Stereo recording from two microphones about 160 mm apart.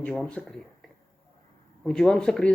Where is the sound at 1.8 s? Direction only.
5° left (ahead or behind).